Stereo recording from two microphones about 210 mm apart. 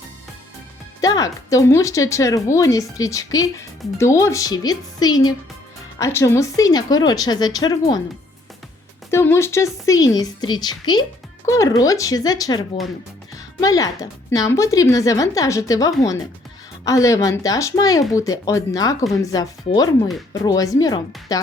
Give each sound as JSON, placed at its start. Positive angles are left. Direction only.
{"t": 1.0, "sound": "speech", "side_deg": 15}
{"t": 9.0, "sound": "a woman's voice", "side_deg": 10}